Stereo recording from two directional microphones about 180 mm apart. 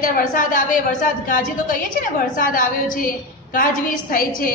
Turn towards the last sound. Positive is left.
turn(degrees=50)  # may be behind; listen again after turning